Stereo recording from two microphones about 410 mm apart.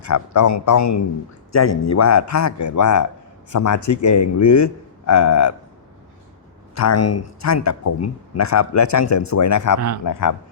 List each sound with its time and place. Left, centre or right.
0.0 s a man's voice: left
6.7 s a man's voice: left